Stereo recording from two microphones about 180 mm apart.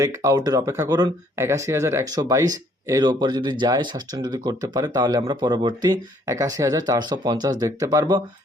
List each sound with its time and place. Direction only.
0.0 s speech: 15° right (ahead or behind)